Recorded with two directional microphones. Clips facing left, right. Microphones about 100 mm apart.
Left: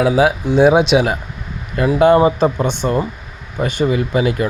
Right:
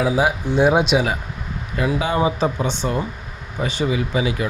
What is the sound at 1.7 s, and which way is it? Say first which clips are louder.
Speech: left 9 dB; 55° left (ahead or behind).